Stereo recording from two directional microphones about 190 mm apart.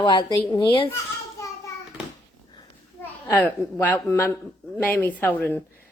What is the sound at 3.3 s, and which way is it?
A woman's voice, 10° left (ahead or behind).